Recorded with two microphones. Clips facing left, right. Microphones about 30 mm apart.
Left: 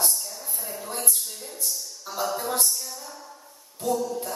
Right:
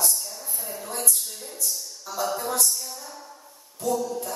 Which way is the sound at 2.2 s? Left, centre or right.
Centre.